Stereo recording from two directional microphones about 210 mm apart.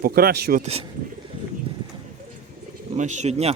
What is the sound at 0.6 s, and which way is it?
Speech, 30° right (ahead or behind).